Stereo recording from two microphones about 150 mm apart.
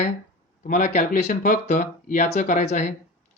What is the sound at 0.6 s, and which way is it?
Speech, 55° left (ahead or behind).